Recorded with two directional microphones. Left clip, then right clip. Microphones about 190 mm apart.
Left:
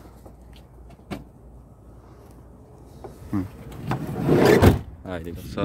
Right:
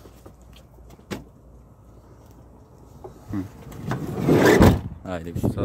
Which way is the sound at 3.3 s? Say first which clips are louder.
Left 3 dB; 65° left (ahead or behind).